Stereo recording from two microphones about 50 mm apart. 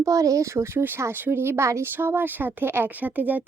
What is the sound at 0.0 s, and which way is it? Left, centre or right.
Speech, right.